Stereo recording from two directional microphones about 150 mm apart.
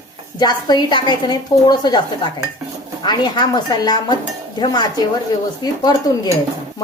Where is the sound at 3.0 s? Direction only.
30° left (ahead or behind).